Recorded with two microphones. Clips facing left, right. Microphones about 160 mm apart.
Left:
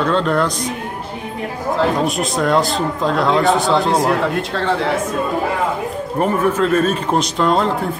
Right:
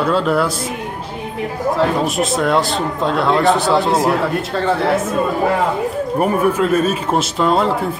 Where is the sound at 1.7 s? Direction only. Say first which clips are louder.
Even; centre (ahead or behind).